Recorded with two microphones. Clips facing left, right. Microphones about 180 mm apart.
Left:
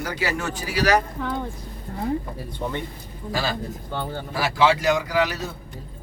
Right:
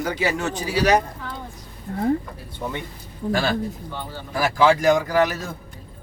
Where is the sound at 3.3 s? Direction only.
55° right (ahead or behind).